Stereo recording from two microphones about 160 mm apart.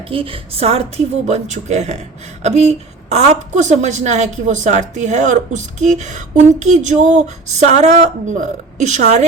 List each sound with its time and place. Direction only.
0.0 s a woman's voice: 35° right (ahead or behind)